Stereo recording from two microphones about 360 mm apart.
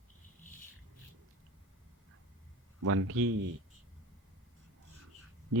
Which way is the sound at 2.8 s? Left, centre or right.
Right.